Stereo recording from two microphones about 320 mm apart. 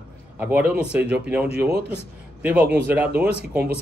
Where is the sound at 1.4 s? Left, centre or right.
Right.